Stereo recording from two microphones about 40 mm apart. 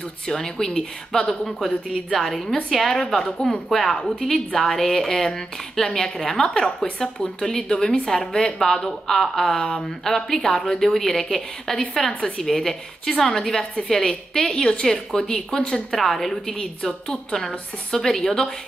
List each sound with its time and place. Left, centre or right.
0.3 s a woman's voice: centre
15.9 s a woman's voice: centre
16.5 s a woman's voice: centre